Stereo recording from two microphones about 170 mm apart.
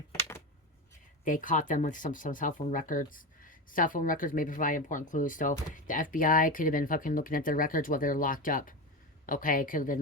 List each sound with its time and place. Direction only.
1.2 s speech: 50° left (ahead or behind)